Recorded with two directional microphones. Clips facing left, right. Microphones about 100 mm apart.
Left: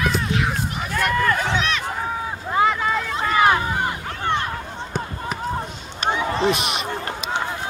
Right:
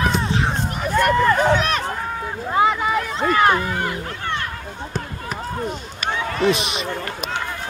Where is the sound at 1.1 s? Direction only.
25° right (ahead or behind).